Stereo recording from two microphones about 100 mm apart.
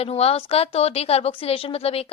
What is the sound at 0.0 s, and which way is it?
A woman's voice, 90° left.